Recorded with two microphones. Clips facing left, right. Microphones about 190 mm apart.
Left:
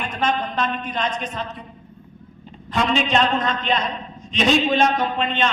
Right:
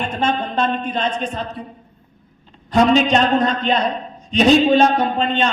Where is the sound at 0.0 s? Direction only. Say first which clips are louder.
Right 3 dB; 30° right (ahead or behind).